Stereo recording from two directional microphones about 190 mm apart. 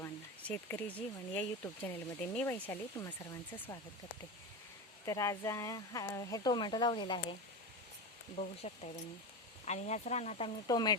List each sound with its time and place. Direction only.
0.0 s speech: 10° left (ahead or behind)
5.0 s speech: 15° left (ahead or behind)
8.4 s speech: 35° left (ahead or behind)
10.7 s speech: 20° left (ahead or behind)